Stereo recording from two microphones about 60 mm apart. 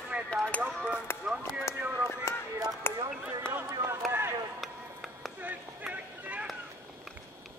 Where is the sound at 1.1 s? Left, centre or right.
Left.